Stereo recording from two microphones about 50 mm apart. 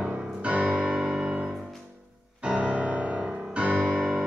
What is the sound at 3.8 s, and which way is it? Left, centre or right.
Music, centre.